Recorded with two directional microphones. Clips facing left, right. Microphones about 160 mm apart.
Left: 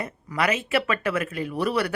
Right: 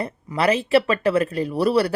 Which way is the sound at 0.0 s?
30° right (ahead or behind).